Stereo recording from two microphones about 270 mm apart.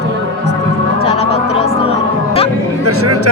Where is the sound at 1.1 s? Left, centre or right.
Left.